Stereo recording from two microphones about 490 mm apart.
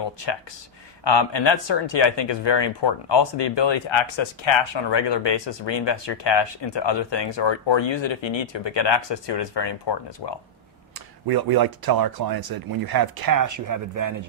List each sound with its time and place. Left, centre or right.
1.0 s speech: left
11.3 s speech: right